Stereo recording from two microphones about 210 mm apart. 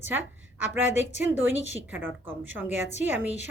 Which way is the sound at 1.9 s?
10° right (ahead or behind).